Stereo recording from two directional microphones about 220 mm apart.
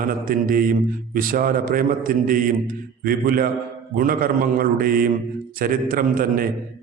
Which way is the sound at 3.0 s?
40° right (ahead or behind).